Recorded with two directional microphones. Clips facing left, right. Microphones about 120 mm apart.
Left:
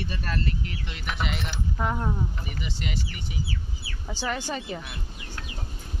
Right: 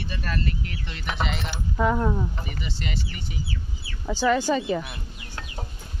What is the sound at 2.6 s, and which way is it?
Speech, 10° left (ahead or behind).